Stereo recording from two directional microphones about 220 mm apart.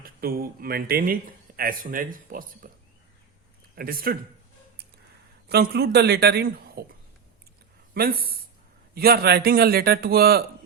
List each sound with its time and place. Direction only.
0.0 s speech: 40° right (ahead or behind)
2.6 s a sound: 40° right (ahead or behind)
3.8 s speech: 40° right (ahead or behind)
5.5 s a man's voice: 45° right (ahead or behind)
7.9 s a man's voice: 45° right (ahead or behind)